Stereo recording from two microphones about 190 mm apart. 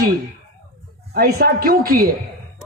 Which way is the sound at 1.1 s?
55° right (ahead or behind).